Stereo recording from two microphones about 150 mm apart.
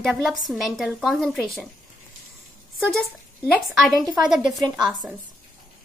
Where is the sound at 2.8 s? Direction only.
Centre (ahead or behind).